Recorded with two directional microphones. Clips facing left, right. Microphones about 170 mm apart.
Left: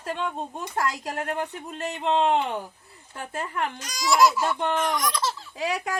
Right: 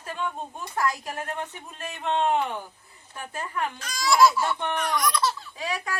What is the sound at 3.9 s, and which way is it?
Speech, 15° left (ahead or behind).